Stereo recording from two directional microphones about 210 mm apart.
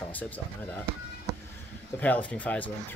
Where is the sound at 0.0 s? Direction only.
10° left (ahead or behind).